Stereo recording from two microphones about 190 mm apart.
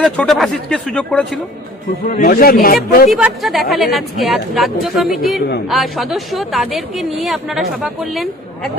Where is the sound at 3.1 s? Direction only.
Centre (ahead or behind).